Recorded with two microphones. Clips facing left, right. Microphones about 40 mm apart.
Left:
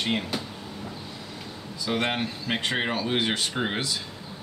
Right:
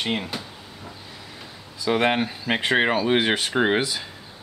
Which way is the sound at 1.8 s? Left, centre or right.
Centre.